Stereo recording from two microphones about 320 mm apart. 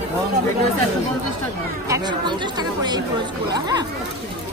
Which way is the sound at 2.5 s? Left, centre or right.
Centre.